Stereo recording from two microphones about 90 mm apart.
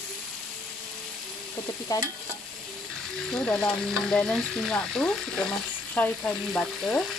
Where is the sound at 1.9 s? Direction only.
40° left (ahead or behind).